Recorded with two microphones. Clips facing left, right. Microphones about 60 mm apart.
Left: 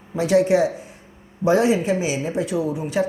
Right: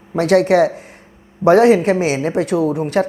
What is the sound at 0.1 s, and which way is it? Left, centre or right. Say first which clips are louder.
A woman's voice: right 4 dB; right.